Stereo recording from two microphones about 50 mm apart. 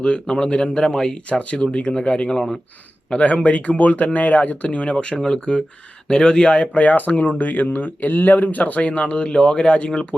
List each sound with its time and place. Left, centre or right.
0.0 s speech: centre
1.3 s speech: left
2.3 s speech: centre
3.1 s speech: left